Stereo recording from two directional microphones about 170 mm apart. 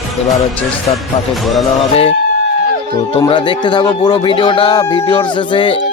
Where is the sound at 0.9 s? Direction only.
Centre (ahead or behind).